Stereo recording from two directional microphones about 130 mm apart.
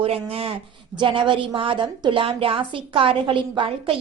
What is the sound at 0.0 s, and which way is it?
A woman's voice, 50° right (ahead or behind).